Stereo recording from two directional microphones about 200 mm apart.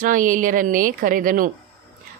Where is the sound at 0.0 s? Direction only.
40° right (ahead or behind).